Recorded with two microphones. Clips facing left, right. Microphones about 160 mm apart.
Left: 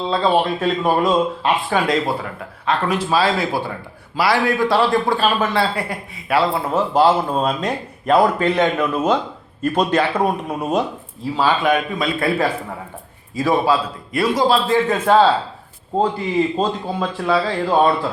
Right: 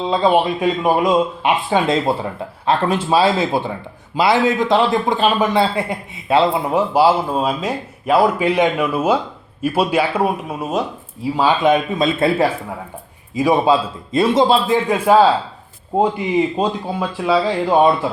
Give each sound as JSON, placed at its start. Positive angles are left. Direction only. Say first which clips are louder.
{"t": 0.1, "sound": "a man's voice", "louder": "right 2 dB", "side_deg": -15}
{"t": 11.3, "sound": "speech", "louder": "right 2 dB", "side_deg": -20}
{"t": 14.8, "sound": "a man's voice", "louder": "right 3 dB", "side_deg": -10}